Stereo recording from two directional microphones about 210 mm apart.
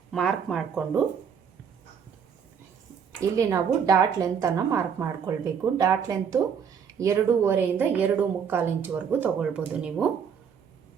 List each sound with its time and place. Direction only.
0.1 s speech: centre (ahead or behind)
3.2 s a woman's voice: 15° right (ahead or behind)